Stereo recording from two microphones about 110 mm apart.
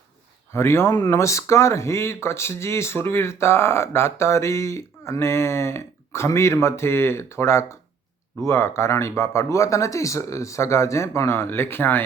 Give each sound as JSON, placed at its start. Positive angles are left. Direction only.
{"t": 0.5, "sound": "speech", "side_deg": 25}